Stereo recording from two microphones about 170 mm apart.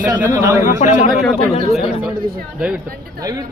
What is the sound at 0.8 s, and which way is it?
Speech, 45° left (ahead or behind).